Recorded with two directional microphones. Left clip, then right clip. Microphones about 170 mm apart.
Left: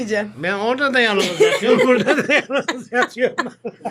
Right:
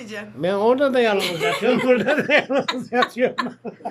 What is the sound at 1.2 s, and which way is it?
Speech, 35° left (ahead or behind).